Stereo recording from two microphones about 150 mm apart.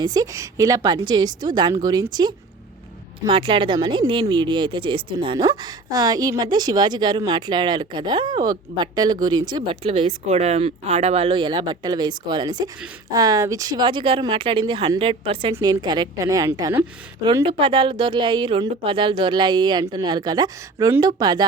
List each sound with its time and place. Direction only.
0.0 s speech: 25° right (ahead or behind)
17.4 s speech: 35° right (ahead or behind)